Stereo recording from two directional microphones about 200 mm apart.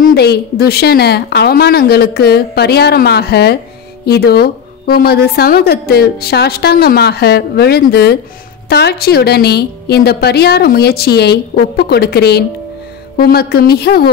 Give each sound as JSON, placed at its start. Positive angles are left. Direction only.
{"t": 0.0, "sound": "a woman's voice", "side_deg": 55}